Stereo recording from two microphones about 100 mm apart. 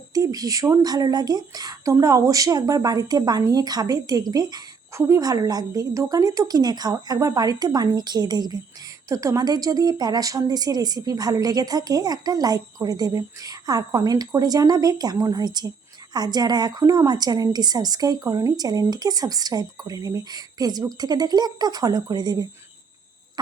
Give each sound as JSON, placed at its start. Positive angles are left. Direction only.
{"t": 0.1, "sound": "a woman's voice", "side_deg": -35}
{"t": 9.0, "sound": "a woman's voice", "side_deg": -35}